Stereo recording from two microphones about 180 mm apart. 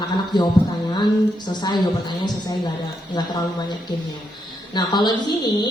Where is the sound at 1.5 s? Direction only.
25° left (ahead or behind).